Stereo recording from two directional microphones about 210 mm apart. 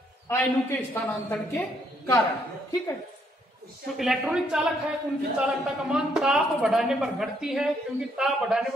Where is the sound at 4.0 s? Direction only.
Centre (ahead or behind).